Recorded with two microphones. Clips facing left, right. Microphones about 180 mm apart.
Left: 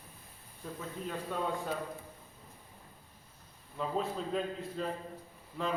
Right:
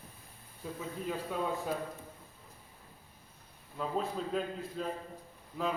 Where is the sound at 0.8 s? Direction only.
5° right (ahead or behind).